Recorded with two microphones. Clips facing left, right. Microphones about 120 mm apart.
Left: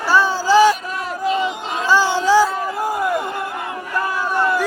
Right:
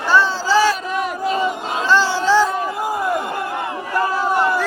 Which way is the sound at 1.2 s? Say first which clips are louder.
Left 2 dB; 40° right (ahead or behind).